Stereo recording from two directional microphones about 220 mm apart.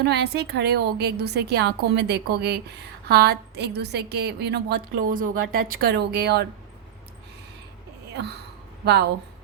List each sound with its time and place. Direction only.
0.0 s a woman's voice: 50° right (ahead or behind)
8.8 s speech: 50° right (ahead or behind)